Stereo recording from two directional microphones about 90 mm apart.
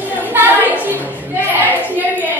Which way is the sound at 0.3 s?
20° right (ahead or behind).